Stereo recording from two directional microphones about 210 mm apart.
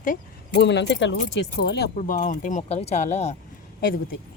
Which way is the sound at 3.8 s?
45° left (ahead or behind).